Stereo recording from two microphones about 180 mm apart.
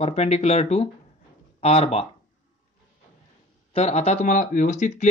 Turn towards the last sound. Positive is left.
turn(degrees=40)  # may be behind; listen again after turning